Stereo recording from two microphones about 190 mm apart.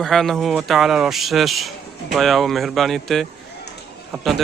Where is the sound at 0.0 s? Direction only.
Centre (ahead or behind).